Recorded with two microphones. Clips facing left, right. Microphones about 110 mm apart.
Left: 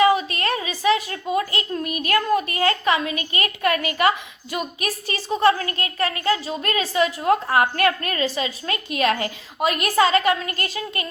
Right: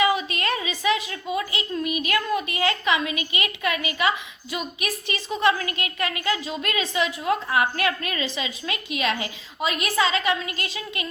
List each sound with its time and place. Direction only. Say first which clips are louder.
0.0 s a child's voice: left 4 dB; 40° left (ahead or behind)